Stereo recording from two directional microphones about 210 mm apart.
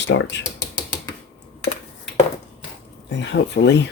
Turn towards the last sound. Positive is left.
turn(degrees=55)  # may be behind; listen again after turning